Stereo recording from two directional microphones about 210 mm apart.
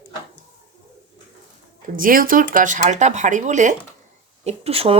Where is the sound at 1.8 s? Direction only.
40° right (ahead or behind).